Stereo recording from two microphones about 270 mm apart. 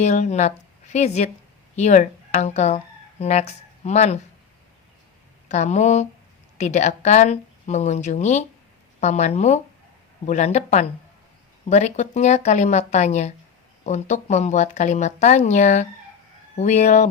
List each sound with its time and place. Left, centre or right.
0.0 s speech: left
5.5 s speech: left